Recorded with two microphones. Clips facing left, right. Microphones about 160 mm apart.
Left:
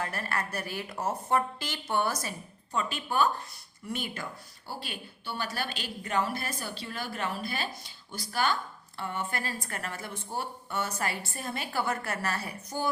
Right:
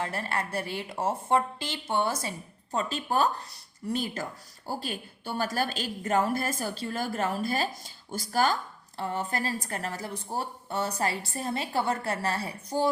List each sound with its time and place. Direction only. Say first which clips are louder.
0.0 s a woman's voice: right 2 dB; 25° right (ahead or behind)